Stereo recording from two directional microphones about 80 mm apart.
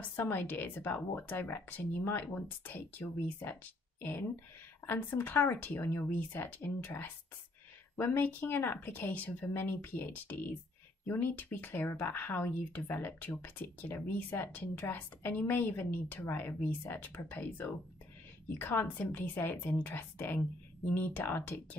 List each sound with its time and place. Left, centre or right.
0.0 s speech: left
8.2 s speech: left